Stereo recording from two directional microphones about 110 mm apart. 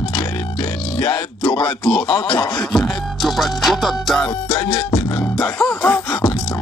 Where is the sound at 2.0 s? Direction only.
50° left (ahead or behind).